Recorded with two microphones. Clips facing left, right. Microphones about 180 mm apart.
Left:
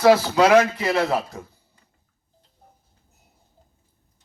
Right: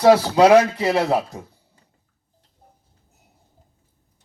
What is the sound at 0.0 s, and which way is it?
Speech, 35° right (ahead or behind).